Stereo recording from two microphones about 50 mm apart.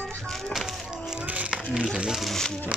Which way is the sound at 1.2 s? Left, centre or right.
Right.